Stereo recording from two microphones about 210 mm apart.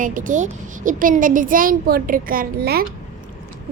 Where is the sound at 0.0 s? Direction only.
40° right (ahead or behind).